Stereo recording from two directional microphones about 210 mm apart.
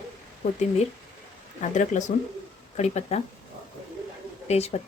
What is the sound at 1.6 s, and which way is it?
Speech, 35° left (ahead or behind).